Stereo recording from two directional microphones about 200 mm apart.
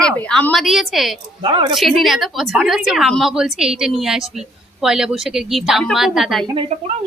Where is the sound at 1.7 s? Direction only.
Centre (ahead or behind).